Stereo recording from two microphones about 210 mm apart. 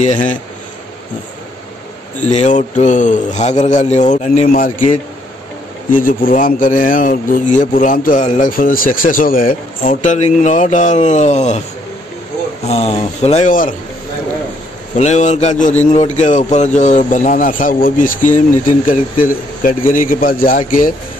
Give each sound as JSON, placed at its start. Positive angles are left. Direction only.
{"t": 0.0, "sound": "speech", "side_deg": 35}
{"t": 2.3, "sound": "speech", "side_deg": 35}
{"t": 12.6, "sound": "speech", "side_deg": 30}
{"t": 15.0, "sound": "speech", "side_deg": 35}